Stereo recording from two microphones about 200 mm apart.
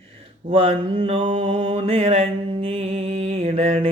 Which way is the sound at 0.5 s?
25° right (ahead or behind).